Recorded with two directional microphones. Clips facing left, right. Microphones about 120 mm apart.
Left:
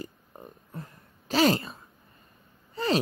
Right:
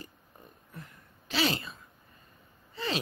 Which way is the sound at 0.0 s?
35° left (ahead or behind).